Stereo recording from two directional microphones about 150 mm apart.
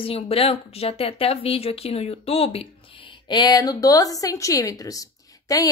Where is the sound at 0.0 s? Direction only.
40° left (ahead or behind).